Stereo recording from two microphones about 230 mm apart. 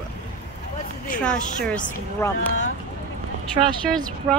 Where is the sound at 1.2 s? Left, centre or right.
Centre.